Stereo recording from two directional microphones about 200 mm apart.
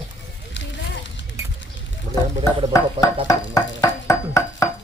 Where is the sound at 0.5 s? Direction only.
65° left (ahead or behind).